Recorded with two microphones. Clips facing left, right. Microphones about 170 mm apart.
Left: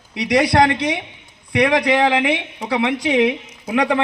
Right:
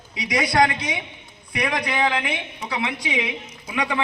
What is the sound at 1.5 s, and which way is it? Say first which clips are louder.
A man's voice: left 9 dB; 80° left.